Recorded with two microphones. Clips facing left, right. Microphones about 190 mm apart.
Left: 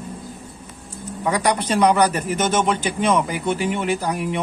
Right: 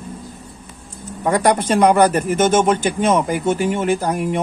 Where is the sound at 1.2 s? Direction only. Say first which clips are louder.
Right 4 dB; 50° right (ahead or behind).